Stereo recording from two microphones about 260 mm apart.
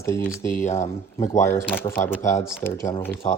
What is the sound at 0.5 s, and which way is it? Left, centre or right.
Speech, left.